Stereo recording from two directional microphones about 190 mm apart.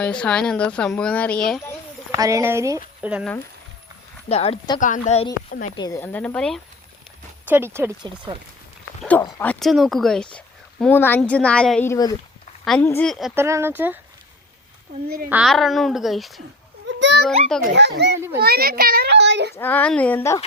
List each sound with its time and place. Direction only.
0.0 s speech: 5° left (ahead or behind)
2.1 s speech: 15° right (ahead or behind)
4.3 s a woman's voice: 30° left (ahead or behind)
5.5 s speech: 45° left (ahead or behind)
5.7 s speech: 20° left (ahead or behind)
7.4 s speech: 10° right (ahead or behind)
9.0 s a sound: 10° left (ahead or behind)
9.4 s speech: 5° left (ahead or behind)
13.3 s speech: 15° right (ahead or behind)
15.3 s speech: centre (ahead or behind)
17.7 s a child's voice: 65° right (ahead or behind)
19.5 s speech: 10° left (ahead or behind)